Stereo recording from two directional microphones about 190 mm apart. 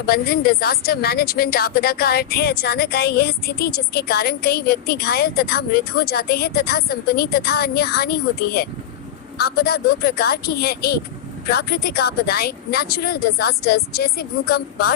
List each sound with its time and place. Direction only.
0.0 s a woman's voice: 50° left (ahead or behind)